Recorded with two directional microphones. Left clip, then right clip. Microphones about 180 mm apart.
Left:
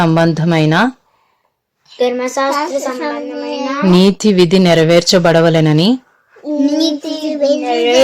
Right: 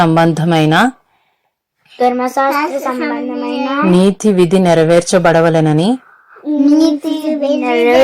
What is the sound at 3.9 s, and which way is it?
Speech, 15° left (ahead or behind).